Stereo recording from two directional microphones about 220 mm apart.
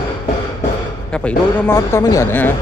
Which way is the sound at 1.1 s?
10° left (ahead or behind).